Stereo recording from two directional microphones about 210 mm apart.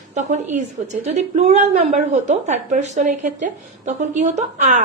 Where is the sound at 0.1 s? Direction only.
35° right (ahead or behind).